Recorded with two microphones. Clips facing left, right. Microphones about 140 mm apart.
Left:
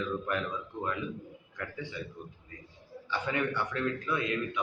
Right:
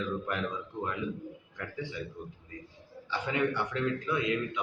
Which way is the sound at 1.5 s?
10° right (ahead or behind).